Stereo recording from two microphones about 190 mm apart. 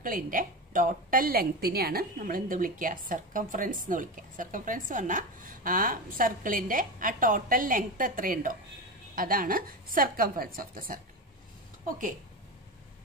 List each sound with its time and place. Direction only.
0.0 s a woman's voice: 45° right (ahead or behind)